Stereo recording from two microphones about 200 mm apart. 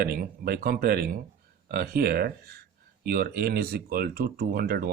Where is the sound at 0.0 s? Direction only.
50° right (ahead or behind).